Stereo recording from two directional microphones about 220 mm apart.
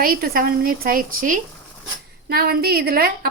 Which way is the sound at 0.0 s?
40° right (ahead or behind).